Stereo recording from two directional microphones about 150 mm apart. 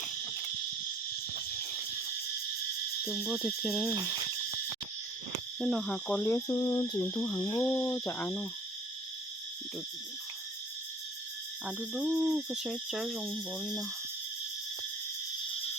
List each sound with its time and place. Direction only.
3.1 s owl: 5° right (ahead or behind)
5.5 s owl: centre (ahead or behind)
6.2 s cricket: 20° left (ahead or behind)
11.6 s owl: 5° right (ahead or behind)